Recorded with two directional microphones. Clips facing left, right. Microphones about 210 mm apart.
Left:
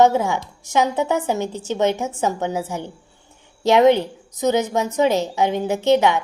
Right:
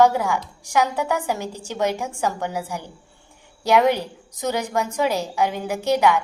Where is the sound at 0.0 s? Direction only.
25° left (ahead or behind).